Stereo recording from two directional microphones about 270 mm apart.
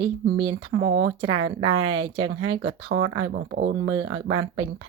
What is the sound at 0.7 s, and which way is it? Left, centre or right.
Speech, right.